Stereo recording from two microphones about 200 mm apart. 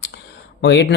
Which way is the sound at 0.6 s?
60° left (ahead or behind).